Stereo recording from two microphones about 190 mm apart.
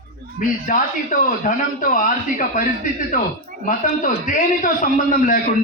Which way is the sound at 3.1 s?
45° left (ahead or behind).